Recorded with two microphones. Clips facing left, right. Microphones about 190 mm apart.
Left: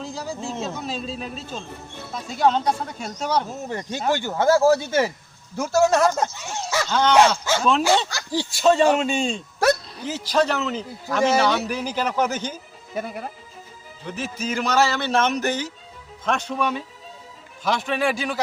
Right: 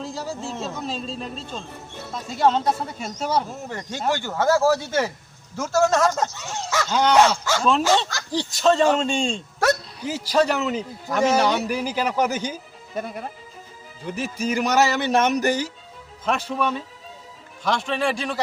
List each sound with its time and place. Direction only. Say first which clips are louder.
0.0 s speech: even; centre (ahead or behind)
3.5 s speech: left 3 dB; 20° left (ahead or behind)
6.9 s a man's voice: even; 10° right (ahead or behind)
8.4 s speech: left 1 dB; 10° left (ahead or behind)
10.1 s a man's voice: right 1 dB; 10° right (ahead or behind)
12.9 s speech: even; centre (ahead or behind)
14.1 s a man's voice: right 3 dB; 10° right (ahead or behind)